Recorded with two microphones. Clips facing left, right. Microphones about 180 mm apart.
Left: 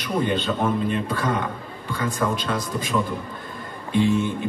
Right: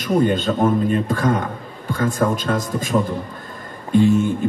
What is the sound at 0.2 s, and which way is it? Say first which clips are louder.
A man's voice: right 4 dB; 45° right (ahead or behind).